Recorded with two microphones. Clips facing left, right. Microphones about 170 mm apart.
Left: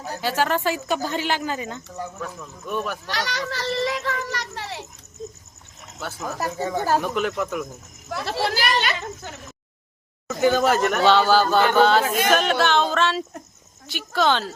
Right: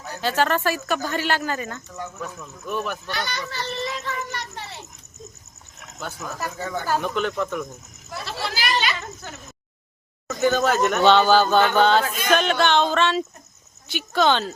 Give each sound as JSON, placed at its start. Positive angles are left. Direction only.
{"t": 0.2, "sound": "a man's voice", "side_deg": 10}
{"t": 2.2, "sound": "music", "side_deg": 0}
{"t": 3.1, "sound": "a child's voice", "side_deg": 90}
{"t": 5.8, "sound": "a sound", "side_deg": 5}
{"t": 6.6, "sound": "speech", "side_deg": 25}
{"t": 7.0, "sound": "a man's voice", "side_deg": 5}
{"t": 8.1, "sound": "speech", "side_deg": 60}
{"t": 8.4, "sound": "chatter", "side_deg": 55}
{"t": 10.4, "sound": "a man's voice", "side_deg": 10}
{"t": 11.8, "sound": "music", "side_deg": 5}